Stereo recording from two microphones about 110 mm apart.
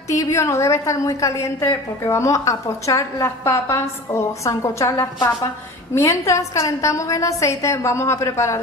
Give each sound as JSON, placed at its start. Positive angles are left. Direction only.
{"t": 0.1, "sound": "a woman's voice", "side_deg": 25}